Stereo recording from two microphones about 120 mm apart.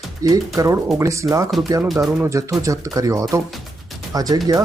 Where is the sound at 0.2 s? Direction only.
30° right (ahead or behind).